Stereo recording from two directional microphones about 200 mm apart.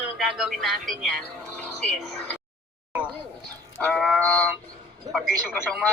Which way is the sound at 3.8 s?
Centre (ahead or behind).